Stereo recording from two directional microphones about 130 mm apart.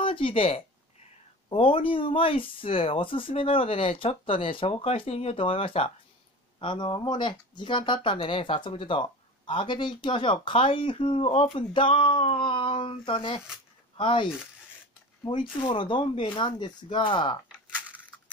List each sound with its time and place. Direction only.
0.0 s speech: 45° left (ahead or behind)
15.6 s speech: 40° left (ahead or behind)